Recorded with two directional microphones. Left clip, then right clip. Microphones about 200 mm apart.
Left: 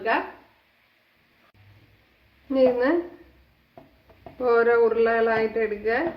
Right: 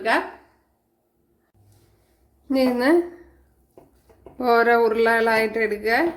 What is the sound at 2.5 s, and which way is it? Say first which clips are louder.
Speech: even; 45° right (ahead or behind).